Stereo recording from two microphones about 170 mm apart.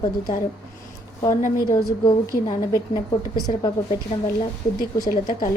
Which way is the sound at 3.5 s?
30° left (ahead or behind).